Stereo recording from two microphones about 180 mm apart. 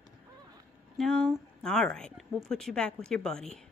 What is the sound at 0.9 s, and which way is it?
Speech, centre (ahead or behind).